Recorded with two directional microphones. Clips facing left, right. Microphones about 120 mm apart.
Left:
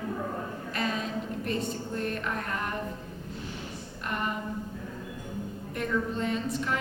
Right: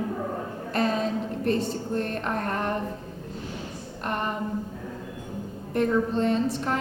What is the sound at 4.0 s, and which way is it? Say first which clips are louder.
Speech: right 4 dB; 40° right (ahead or behind).